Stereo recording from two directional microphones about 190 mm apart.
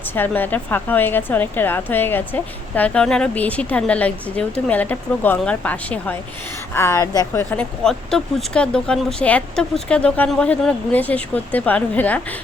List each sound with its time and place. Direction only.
0.1 s a woman's voice: 10° left (ahead or behind)
7.5 s speech: 5° left (ahead or behind)